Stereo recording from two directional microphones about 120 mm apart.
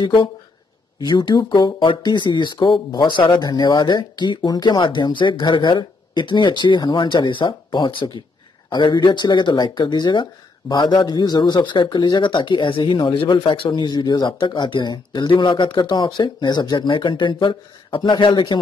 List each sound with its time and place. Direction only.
0.0 s speech: 45° left (ahead or behind)